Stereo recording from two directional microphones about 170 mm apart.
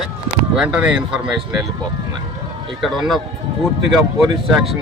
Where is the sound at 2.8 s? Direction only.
Centre (ahead or behind).